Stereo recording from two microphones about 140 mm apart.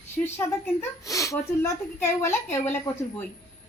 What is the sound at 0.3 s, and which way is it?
A woman's voice, 15° left (ahead or behind).